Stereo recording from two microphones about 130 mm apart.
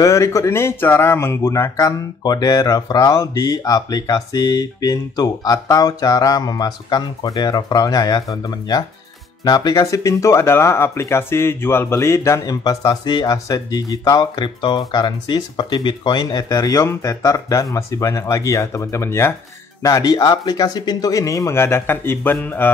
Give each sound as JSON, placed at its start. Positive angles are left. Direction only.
{"t": 0.0, "sound": "speech", "side_deg": 25}